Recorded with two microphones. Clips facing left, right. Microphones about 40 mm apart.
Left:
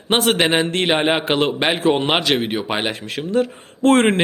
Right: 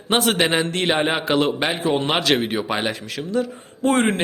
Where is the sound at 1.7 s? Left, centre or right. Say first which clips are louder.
Left 5 dB; left.